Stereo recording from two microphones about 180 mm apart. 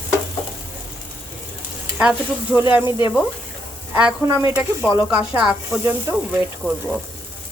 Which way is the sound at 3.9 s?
10° right (ahead or behind).